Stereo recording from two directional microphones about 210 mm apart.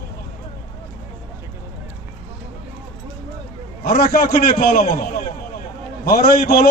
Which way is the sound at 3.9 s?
45° left (ahead or behind).